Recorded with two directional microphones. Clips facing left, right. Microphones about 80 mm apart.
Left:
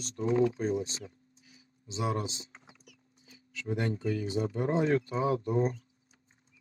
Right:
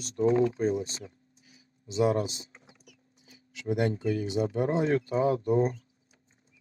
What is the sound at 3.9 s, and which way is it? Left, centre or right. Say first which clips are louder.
Speech: right 2 dB; right.